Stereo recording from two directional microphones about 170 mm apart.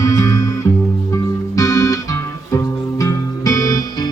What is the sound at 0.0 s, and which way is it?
Music, 15° left (ahead or behind).